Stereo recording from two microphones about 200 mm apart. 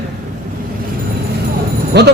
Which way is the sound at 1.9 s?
55° right (ahead or behind).